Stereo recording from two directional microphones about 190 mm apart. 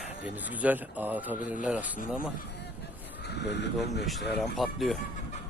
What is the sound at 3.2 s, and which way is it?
Speech, 60° left (ahead or behind).